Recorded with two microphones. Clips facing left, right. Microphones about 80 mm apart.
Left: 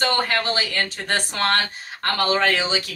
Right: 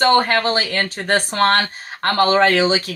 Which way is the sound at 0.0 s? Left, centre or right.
Right.